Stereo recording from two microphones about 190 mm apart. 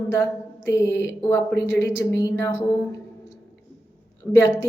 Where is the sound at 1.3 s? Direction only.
15° left (ahead or behind).